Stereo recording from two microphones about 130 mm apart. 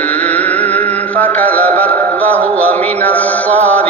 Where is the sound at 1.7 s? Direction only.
10° left (ahead or behind).